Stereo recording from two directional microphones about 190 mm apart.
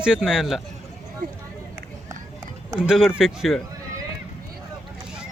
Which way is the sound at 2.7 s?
Centre (ahead or behind).